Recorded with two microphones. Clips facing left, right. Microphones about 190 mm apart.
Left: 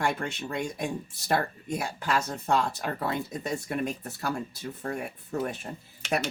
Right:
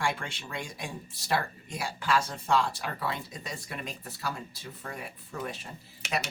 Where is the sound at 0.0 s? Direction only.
45° left (ahead or behind).